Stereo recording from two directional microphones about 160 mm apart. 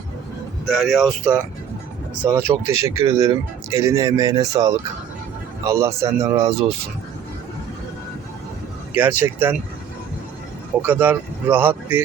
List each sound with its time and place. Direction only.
0.6 s speech: centre (ahead or behind); by 6.7 s 20° right (ahead or behind)
9.0 s a man's voice: 10° right (ahead or behind)
10.8 s a man's voice: 10° right (ahead or behind)